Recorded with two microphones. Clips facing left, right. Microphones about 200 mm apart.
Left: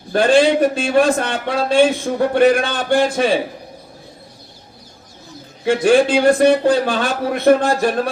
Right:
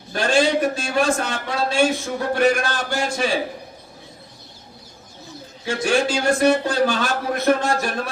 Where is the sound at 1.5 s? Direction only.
60° left (ahead or behind).